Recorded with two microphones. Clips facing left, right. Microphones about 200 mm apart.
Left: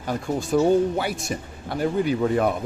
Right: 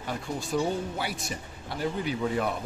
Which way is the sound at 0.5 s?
50° left (ahead or behind).